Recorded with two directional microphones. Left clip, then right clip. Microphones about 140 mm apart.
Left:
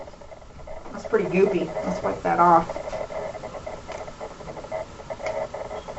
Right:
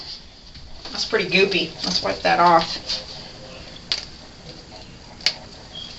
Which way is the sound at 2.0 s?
40° right (ahead or behind).